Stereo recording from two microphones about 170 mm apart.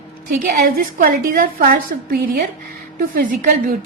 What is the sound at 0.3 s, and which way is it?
A woman's voice, 55° right (ahead or behind).